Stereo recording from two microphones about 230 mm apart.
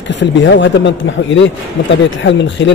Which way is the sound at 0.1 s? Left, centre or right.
Left.